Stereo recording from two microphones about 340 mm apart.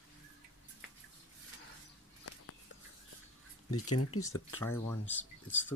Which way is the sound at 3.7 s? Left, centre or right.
Left.